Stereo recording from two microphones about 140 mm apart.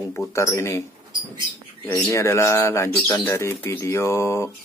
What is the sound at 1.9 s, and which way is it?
Speech, 20° left (ahead or behind).